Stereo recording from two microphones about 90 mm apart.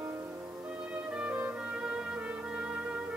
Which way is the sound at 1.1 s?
15° right (ahead or behind).